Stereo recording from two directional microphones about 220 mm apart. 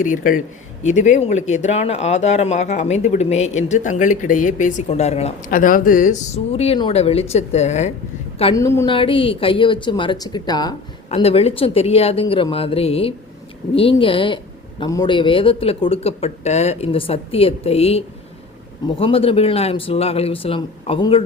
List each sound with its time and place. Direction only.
0.0 s speech: 35° left (ahead or behind)
8.5 s speech: 15° left (ahead or behind)